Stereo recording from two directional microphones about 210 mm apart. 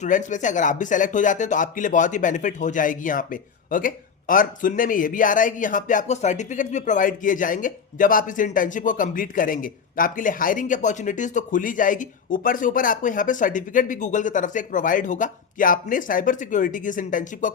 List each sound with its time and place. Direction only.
0.0 s speech: 35° left (ahead or behind)